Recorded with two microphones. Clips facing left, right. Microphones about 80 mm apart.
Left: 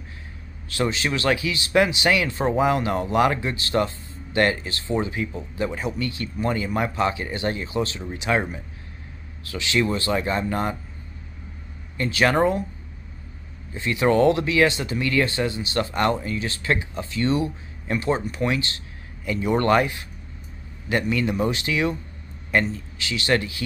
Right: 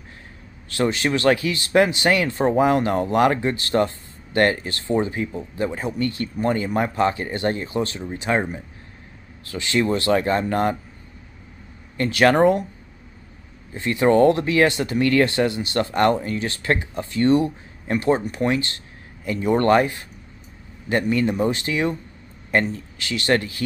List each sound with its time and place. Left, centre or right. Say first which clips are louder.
0.7 s speech: right 3 dB; right
8.1 s speech: right 1 dB; right
9.5 s speech: right 2 dB; right
9.9 s speech: right 4 dB; right
12.0 s speech: right 4 dB; right
13.7 s speech: right 3 dB; right